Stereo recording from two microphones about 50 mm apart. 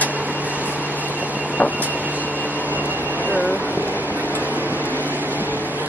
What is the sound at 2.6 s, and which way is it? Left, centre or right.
Vehicle, right.